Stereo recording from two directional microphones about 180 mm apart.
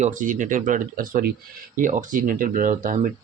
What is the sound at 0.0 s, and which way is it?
Speech, 45° right (ahead or behind).